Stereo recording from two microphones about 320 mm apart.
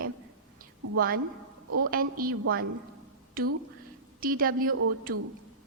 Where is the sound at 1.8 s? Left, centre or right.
Right.